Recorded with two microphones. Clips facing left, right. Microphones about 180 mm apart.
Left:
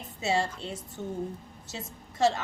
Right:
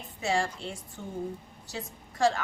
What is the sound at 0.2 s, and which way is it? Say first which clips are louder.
A woman's voice: left 1 dB; 20° left (ahead or behind).